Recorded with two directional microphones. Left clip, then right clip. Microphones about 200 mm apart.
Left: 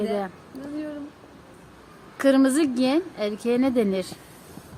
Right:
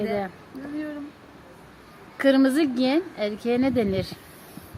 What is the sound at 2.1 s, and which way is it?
A woman's voice, 5° left (ahead or behind).